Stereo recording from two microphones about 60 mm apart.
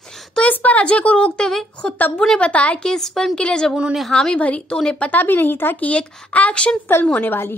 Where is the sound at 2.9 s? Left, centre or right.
Centre; by 5.9 s left.